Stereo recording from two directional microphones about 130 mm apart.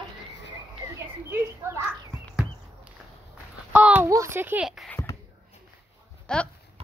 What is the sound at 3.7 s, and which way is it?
Speech, 10° right (ahead or behind).